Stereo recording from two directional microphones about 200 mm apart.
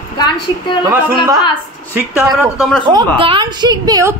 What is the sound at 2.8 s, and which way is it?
A woman's voice, 25° right (ahead or behind).